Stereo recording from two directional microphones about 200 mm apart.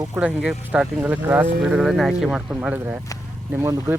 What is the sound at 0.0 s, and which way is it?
Speech, 10° right (ahead or behind).